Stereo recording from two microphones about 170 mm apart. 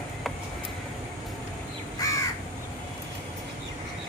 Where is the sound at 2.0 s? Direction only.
20° left (ahead or behind).